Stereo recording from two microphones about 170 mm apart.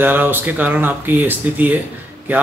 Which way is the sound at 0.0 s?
10° right (ahead or behind).